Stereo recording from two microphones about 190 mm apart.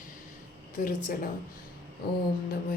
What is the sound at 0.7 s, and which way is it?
Speech, 45° left (ahead or behind).